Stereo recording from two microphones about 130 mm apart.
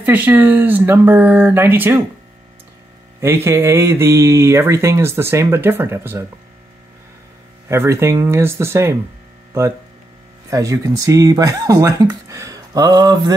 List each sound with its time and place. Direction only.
0.0 s speech: 15° right (ahead or behind)
3.2 s speech: 20° right (ahead or behind)
7.6 s speech: 20° right (ahead or behind)
10.5 s speech: 25° right (ahead or behind)